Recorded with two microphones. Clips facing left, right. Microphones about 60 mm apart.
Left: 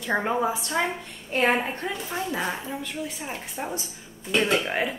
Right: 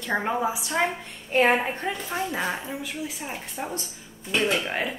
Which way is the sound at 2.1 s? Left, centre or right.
Centre.